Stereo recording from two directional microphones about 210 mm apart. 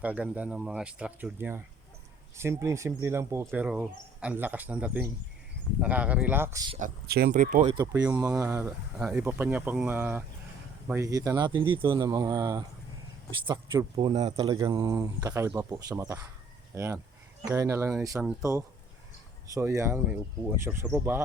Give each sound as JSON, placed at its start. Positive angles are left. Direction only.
{"t": 0.0, "sound": "speech", "side_deg": -5}
{"t": 6.7, "sound": "speech", "side_deg": -45}
{"t": 7.8, "sound": "speech", "side_deg": -20}
{"t": 19.5, "sound": "speech", "side_deg": -15}